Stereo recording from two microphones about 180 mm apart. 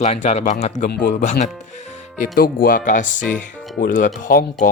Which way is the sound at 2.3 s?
55° left (ahead or behind).